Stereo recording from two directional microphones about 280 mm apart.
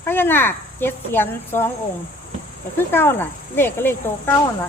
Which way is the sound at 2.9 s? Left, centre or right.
Centre.